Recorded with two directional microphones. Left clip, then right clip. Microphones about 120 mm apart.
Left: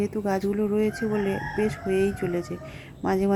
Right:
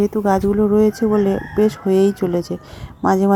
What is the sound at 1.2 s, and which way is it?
Speech, 35° right (ahead or behind).